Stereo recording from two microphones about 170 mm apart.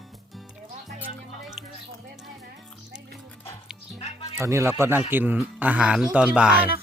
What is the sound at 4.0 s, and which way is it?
Music, 35° left (ahead or behind).